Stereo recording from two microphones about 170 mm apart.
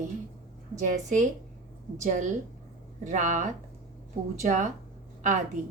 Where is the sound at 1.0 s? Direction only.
45° right (ahead or behind).